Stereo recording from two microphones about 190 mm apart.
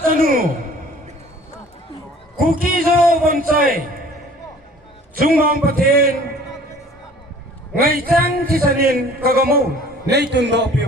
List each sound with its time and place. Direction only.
0.0 s a woman's voice: 45° right (ahead or behind)
2.4 s a man's voice: 50° right (ahead or behind)
5.1 s speech: 50° right (ahead or behind)
7.8 s a man's voice: 50° right (ahead or behind)